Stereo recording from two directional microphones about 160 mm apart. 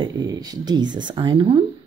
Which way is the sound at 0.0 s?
30° right (ahead or behind).